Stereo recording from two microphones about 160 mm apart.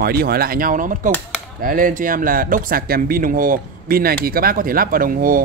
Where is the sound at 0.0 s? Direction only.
70° right (ahead or behind).